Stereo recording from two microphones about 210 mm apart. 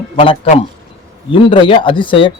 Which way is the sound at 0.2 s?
25° left (ahead or behind).